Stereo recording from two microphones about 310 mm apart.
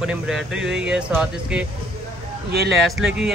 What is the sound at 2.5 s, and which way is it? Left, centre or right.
Speech, right.